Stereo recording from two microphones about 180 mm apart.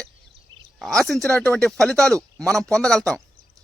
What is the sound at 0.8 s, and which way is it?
Speech, centre (ahead or behind).